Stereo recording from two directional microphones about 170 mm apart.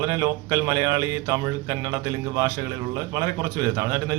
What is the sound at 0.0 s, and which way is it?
Speech, 20° right (ahead or behind).